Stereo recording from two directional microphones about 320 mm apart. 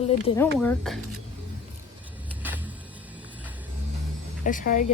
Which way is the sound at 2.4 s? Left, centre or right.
Centre.